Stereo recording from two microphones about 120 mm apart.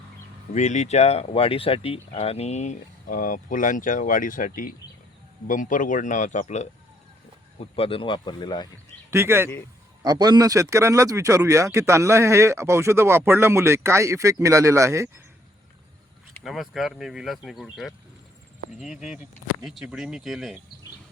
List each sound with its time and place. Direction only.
0.5 s speech: 75° left (ahead or behind)
3.2 s speech: 90° left
5.5 s speech: 90° left
7.6 s speech: 50° left (ahead or behind)
9.0 s speech: 20° right (ahead or behind)
10.0 s speech: 35° right (ahead or behind)
16.4 s speech: centre (ahead or behind)
19.0 s speech: 10° right (ahead or behind)